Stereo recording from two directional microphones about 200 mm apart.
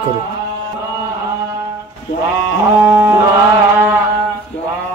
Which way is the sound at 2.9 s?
10° right (ahead or behind).